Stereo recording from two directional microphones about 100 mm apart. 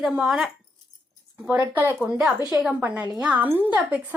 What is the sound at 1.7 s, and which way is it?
A woman's voice, 20° right (ahead or behind).